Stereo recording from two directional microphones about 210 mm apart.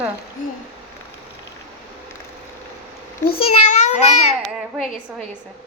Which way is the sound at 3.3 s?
30° left (ahead or behind).